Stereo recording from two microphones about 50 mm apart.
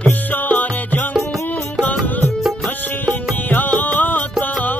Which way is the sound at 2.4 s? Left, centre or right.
Centre.